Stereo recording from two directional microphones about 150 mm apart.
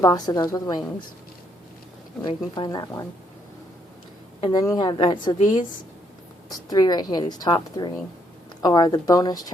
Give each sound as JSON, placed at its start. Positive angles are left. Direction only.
{"t": 0.0, "sound": "a woman's voice", "side_deg": 25}
{"t": 2.2, "sound": "a woman's voice", "side_deg": 30}
{"t": 4.6, "sound": "a woman's voice", "side_deg": 25}